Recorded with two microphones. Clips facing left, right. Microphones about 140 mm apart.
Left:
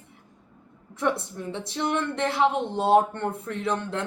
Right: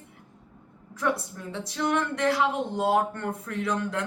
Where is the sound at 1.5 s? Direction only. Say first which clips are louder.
Even; 25° left (ahead or behind).